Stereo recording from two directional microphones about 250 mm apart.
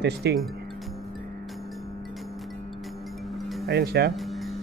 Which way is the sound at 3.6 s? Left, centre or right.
Right.